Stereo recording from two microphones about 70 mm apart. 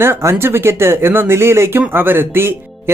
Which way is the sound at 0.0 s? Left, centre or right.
Right.